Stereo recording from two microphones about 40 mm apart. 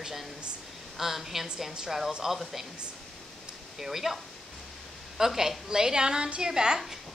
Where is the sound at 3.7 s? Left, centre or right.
Centre.